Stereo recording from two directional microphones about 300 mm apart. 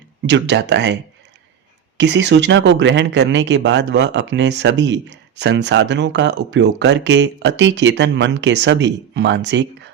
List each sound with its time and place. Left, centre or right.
0.3 s speech: right
2.0 s speech: right